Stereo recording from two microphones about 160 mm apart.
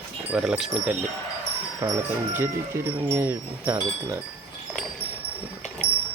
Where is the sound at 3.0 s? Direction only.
15° right (ahead or behind).